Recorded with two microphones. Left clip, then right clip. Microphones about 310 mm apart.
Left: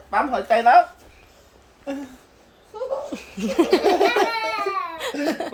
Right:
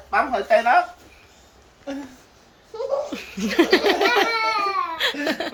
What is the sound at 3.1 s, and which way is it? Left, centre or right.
Speech, centre.